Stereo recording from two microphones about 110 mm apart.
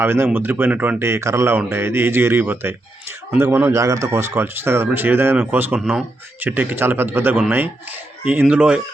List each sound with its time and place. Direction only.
0.0 s a man's voice: 20° right (ahead or behind)
5.8 s speech: centre (ahead or behind)
6.4 s a man's voice: 15° right (ahead or behind)